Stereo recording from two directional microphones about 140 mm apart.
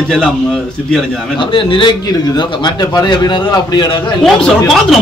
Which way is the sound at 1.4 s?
35° left (ahead or behind).